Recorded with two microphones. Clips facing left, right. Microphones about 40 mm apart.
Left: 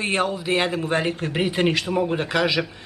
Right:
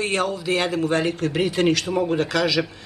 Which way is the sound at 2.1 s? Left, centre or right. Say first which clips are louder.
Right 1 dB; left.